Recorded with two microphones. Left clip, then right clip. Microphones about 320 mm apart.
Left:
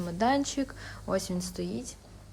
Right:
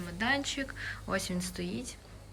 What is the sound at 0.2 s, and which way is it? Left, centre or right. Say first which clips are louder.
A woman's voice: left 4 dB; centre.